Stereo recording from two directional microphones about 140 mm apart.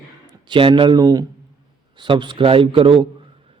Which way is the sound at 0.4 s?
35° right (ahead or behind).